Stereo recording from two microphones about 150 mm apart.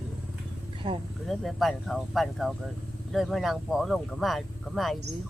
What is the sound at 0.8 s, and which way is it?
Speech, 40° right (ahead or behind).